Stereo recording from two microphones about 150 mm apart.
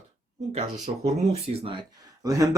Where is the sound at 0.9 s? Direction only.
50° right (ahead or behind).